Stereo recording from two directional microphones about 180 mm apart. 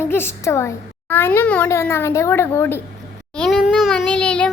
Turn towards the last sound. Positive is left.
turn(degrees=5)  # may be behind; listen again after turning